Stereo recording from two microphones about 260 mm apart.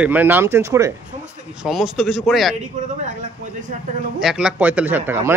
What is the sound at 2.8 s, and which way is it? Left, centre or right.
Speech, right.